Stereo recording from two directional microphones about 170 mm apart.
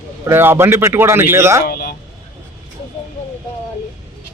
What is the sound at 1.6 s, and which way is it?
Speech, 65° left (ahead or behind).